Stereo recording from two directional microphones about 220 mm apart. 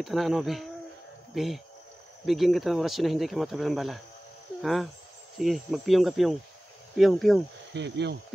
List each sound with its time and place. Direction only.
0.0 s speech: centre (ahead or behind)
7.7 s speech: 50° right (ahead or behind)